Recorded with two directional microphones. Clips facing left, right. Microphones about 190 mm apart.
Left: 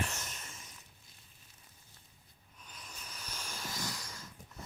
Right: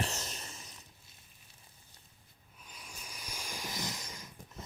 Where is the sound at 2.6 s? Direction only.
10° right (ahead or behind).